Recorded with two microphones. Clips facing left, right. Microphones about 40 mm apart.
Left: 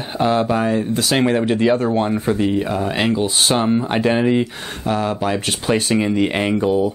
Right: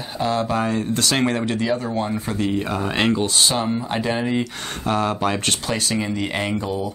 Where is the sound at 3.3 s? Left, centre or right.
Left.